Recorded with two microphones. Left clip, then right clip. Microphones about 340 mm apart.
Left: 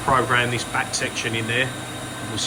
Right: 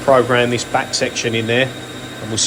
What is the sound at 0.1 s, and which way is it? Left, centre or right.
Speech, centre.